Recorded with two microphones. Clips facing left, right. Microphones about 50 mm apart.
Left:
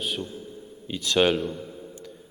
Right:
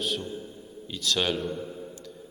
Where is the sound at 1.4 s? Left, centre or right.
Centre.